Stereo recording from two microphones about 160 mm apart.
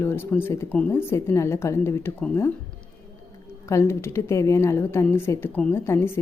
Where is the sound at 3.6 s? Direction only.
20° left (ahead or behind).